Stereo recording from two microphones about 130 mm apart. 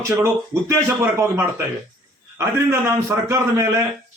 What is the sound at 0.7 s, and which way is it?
A man's voice, 20° right (ahead or behind).